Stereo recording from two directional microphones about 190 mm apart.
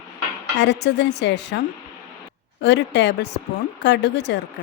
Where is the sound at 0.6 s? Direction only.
65° left (ahead or behind).